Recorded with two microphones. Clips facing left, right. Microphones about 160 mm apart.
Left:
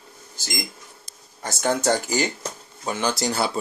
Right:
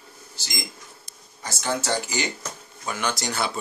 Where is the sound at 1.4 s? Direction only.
50° left (ahead or behind).